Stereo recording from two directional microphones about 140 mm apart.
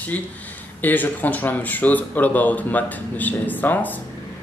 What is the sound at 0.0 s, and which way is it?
Speech, 10° left (ahead or behind).